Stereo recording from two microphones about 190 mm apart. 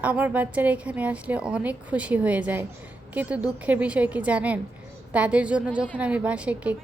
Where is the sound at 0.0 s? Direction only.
10° right (ahead or behind).